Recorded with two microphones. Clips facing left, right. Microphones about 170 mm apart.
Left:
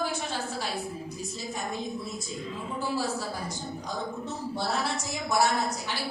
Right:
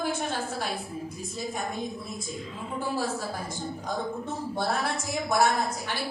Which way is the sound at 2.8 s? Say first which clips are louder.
Right 1 dB; 50° right (ahead or behind).